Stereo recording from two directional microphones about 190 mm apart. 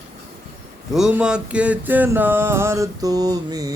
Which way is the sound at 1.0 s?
5° right (ahead or behind).